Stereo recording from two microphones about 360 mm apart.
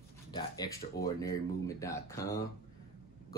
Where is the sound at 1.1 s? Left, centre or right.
Centre.